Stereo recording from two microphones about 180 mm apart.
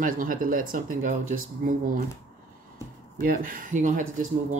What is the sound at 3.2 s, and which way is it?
Speech, 50° right (ahead or behind).